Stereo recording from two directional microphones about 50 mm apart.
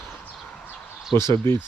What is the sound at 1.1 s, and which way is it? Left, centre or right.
Speech, left.